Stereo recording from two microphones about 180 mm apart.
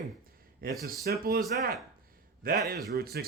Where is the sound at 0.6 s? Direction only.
55° right (ahead or behind).